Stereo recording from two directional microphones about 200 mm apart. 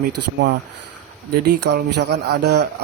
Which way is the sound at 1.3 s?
55° right (ahead or behind).